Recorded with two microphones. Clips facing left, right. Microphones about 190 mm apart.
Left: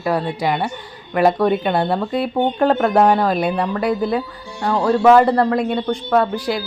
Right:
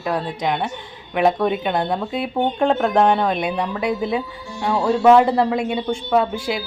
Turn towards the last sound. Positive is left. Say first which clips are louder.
# left 2 dB
turn(degrees=0)  # may be behind; listen again after turning